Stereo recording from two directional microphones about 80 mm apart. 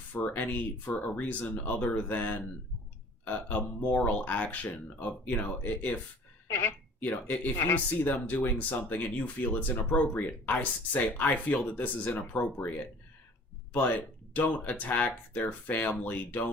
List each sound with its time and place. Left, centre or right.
0.1 s speech: left
6.5 s a sound: left
7.1 s speech: left
13.7 s speech: left